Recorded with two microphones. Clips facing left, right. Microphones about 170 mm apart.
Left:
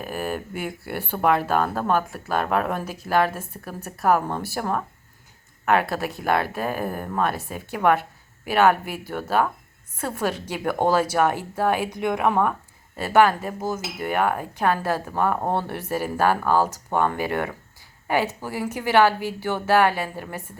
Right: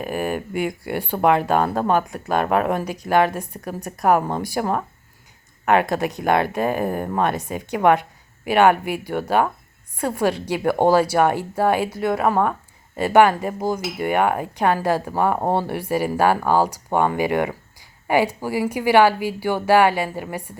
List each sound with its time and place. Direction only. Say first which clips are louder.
0.0 s speech: right 4 dB; 15° right (ahead or behind)
5.8 s speech: right 4 dB; 15° right (ahead or behind)
13.0 s speech: right 3 dB; 15° right (ahead or behind)